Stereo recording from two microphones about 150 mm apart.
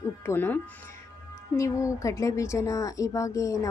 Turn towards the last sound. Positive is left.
turn(degrees=20)  # may be behind; listen again after turning